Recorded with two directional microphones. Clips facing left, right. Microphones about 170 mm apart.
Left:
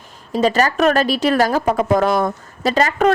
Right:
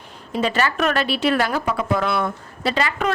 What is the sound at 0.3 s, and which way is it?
A man's voice, 40° left (ahead or behind).